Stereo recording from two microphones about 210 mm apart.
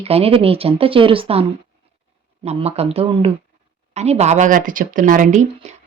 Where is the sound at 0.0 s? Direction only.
30° right (ahead or behind).